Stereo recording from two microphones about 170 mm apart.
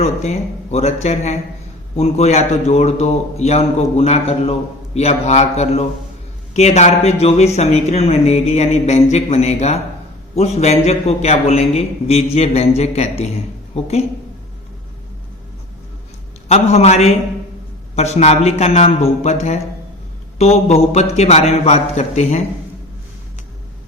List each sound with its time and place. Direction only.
0.0 s speech: 40° left (ahead or behind)
16.5 s speech: 40° left (ahead or behind)